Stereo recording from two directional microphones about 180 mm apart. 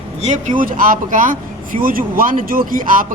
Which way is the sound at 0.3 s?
45° right (ahead or behind).